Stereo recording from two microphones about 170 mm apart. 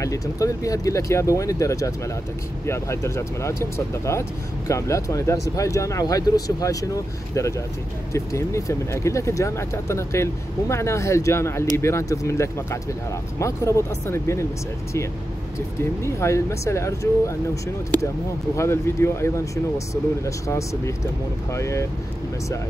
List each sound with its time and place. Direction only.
0.0 s speech: 20° left (ahead or behind)
16.0 s speech: 15° left (ahead or behind)
18.6 s speech: 15° left (ahead or behind)